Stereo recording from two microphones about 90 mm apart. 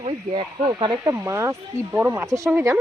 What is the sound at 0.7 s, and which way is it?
Speech, 50° right (ahead or behind).